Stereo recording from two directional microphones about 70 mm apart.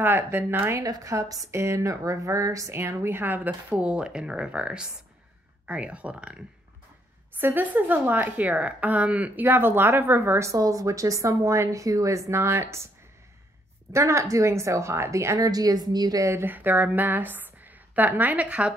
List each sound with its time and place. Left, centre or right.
0.0 s speech: right
0.8 s speech: right
2.8 s speech: right
3.8 s speech: centre
7.3 s a woman's voice: right
10.5 s speech: right
13.9 s speech: right
16.2 s speech: right
16.4 s a woman's voice: right